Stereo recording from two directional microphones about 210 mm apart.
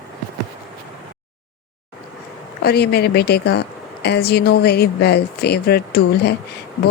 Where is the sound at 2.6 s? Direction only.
50° left (ahead or behind).